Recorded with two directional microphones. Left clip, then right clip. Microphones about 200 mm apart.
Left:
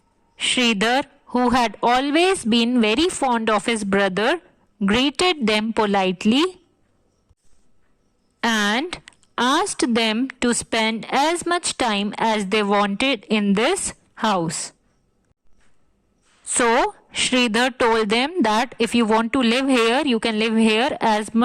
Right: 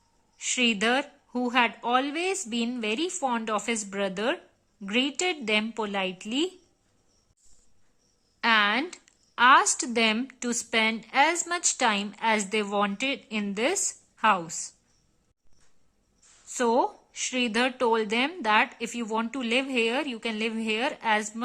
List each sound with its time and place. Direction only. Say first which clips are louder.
0.3 s a woman's voice: left 7 dB; 45° left (ahead or behind)
8.4 s speech: left 2 dB; 40° left (ahead or behind)
16.8 s speech: left 9 dB; 45° left (ahead or behind)